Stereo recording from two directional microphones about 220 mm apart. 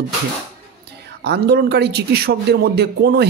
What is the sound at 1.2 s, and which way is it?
A man's voice, 45° right (ahead or behind).